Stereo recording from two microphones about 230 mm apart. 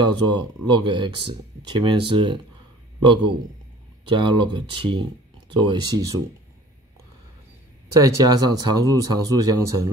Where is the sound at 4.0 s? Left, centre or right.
Right.